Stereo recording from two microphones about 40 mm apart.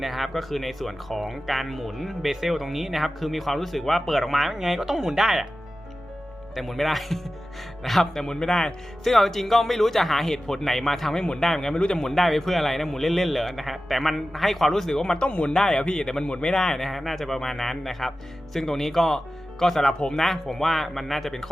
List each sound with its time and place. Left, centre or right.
0.0 s speech: centre
6.6 s speech: centre
9.0 s speech: centre
11.2 s speech: centre
11.4 s speech: centre
11.9 s speech: centre
12.1 s speech: centre
15.2 s speech: left
15.5 s speech: centre
16.2 s speech: left; by 21.5 s centre